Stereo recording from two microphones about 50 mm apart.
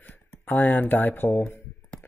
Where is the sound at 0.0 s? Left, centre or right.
Left.